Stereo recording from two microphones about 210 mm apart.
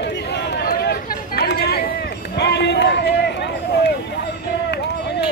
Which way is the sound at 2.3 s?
55° left (ahead or behind).